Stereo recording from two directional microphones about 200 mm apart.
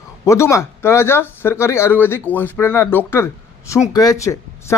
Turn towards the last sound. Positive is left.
turn(degrees=15)  # may be behind; listen again after turning